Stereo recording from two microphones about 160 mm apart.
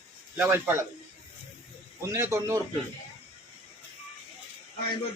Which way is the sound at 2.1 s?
15° right (ahead or behind).